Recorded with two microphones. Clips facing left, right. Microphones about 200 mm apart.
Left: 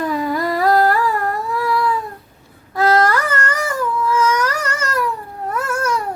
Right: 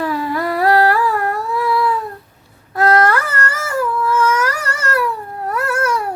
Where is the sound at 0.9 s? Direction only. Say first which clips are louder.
Right 1 dB; centre (ahead or behind).